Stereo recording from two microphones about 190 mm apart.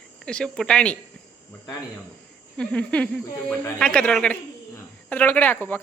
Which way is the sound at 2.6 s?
5° left (ahead or behind).